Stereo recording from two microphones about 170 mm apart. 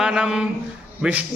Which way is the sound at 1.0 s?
5° right (ahead or behind).